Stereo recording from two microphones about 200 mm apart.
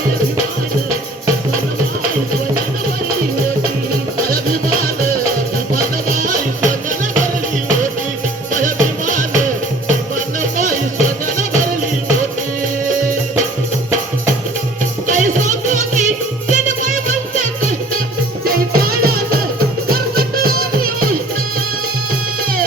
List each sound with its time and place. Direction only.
5.7 s music: 45° right (ahead or behind)
8.5 s music: 40° right (ahead or behind)
10.6 s music: 40° right (ahead or behind)
15.0 s music: 40° right (ahead or behind)
18.4 s music: 50° right (ahead or behind)